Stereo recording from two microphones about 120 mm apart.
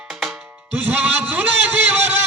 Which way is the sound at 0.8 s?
15° right (ahead or behind).